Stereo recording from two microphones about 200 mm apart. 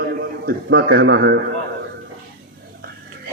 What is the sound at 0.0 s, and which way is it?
A man's voice, 50° right (ahead or behind).